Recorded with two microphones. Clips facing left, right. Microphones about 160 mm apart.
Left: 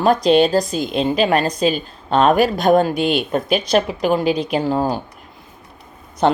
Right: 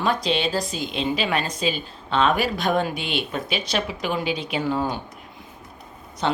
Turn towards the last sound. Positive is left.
turn(degrees=50)  # may be behind; listen again after turning